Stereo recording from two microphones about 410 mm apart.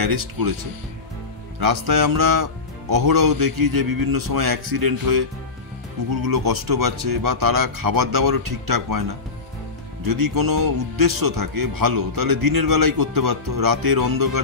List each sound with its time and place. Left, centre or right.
0.0 s speech: right
1.6 s speech: right